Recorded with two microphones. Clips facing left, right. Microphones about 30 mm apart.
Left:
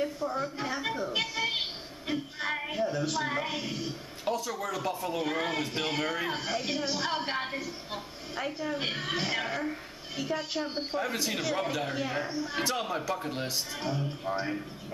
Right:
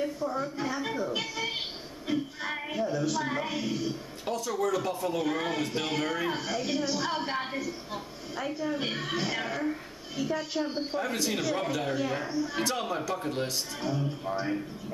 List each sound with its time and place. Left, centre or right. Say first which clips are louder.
0.0 s a woman's voice: even; centre
1.1 s a sound: left 2 dB; centre
2.5 s a woman's voice: even; centre
10.1 s a woman's voice: right 1 dB; centre
11.0 s a woman's voice: right 1 dB; centre
13.7 s a woman's voice: right 3 dB; centre